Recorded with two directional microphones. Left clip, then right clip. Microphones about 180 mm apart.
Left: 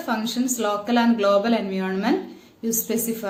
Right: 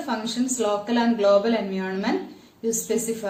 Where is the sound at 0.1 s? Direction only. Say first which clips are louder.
Left 2 dB; 35° left (ahead or behind).